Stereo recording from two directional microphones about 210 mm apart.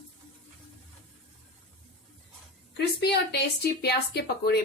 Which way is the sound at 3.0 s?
50° left (ahead or behind).